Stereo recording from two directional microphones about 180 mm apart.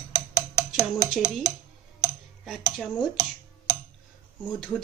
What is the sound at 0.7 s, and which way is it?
Speech, centre (ahead or behind).